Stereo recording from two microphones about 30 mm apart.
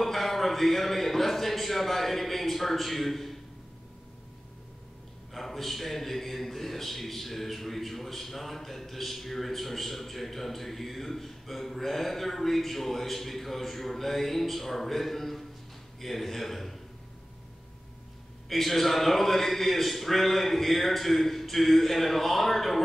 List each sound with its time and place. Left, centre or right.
0.0 s a man's voice: centre
5.3 s a man's voice: centre
18.5 s a man's voice: centre